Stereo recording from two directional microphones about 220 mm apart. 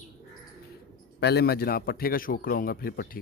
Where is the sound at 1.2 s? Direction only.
50° left (ahead or behind).